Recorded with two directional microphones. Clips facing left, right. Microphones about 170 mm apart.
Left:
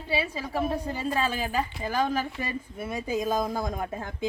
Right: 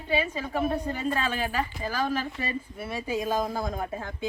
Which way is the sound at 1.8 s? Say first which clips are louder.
Left 3 dB; 20° left (ahead or behind).